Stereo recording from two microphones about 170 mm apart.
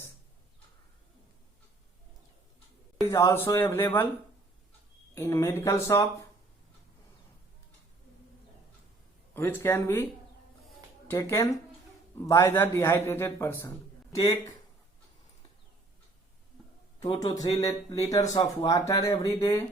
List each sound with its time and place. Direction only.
3.1 s a man's voice: 15° left (ahead or behind)
5.1 s a man's voice: 15° left (ahead or behind)
9.3 s a man's voice: 15° left (ahead or behind)
11.1 s a man's voice: 15° left (ahead or behind)
17.0 s speech: 25° left (ahead or behind)